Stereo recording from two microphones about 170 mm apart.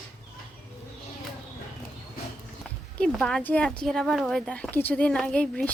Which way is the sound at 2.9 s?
5° left (ahead or behind).